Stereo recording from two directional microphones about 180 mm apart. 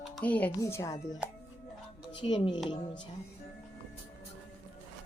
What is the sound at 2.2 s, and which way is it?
Speech, 30° left (ahead or behind).